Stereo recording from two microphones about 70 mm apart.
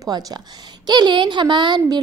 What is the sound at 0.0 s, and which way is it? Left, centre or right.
Speech, right.